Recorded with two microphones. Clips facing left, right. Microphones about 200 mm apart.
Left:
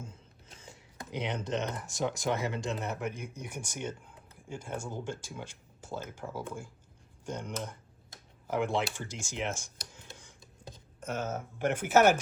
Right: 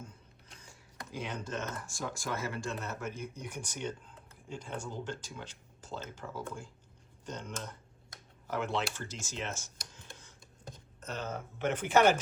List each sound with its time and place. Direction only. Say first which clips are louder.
0.6 s speech: left 3 dB; 25° left (ahead or behind); by 12.2 s 5° left (ahead or behind)